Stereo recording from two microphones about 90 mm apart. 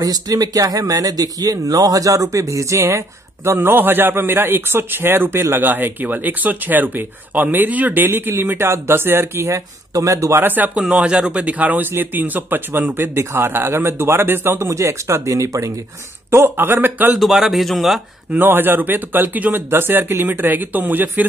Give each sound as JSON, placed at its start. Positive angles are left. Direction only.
{"t": 0.0, "sound": "a man's voice", "side_deg": -45}
{"t": 10.4, "sound": "a man's voice", "side_deg": -20}
{"t": 17.2, "sound": "speech", "side_deg": 0}
{"t": 18.3, "sound": "a man's voice", "side_deg": -20}